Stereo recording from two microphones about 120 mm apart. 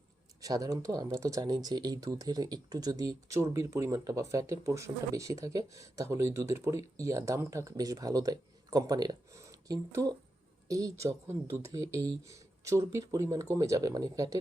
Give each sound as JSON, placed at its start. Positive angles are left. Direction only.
{"t": 0.4, "sound": "speech", "side_deg": -30}